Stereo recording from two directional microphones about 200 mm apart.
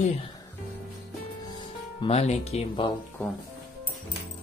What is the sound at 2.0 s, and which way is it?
Speech, 30° left (ahead or behind).